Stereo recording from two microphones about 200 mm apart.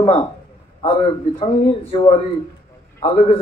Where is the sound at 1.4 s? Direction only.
25° left (ahead or behind).